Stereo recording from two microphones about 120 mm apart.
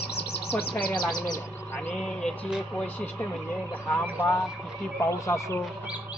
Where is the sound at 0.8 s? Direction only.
35° left (ahead or behind).